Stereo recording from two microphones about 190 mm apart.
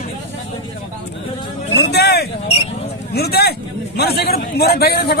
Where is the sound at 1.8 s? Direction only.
60° left (ahead or behind).